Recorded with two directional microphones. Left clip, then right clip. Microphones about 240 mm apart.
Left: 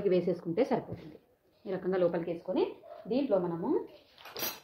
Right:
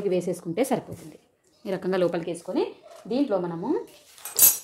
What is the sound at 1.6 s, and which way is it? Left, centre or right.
Speech, right.